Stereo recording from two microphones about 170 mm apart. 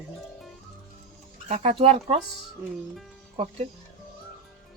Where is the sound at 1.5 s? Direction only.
40° right (ahead or behind).